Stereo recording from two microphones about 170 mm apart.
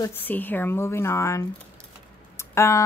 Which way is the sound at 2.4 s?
15° left (ahead or behind).